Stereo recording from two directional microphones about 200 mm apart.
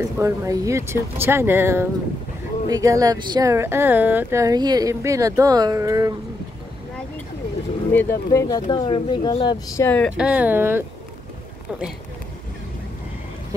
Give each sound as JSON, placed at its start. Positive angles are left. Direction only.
{"t": 0.0, "sound": "speech", "side_deg": -15}
{"t": 7.9, "sound": "speech", "side_deg": 10}
{"t": 10.1, "sound": "speech", "side_deg": -5}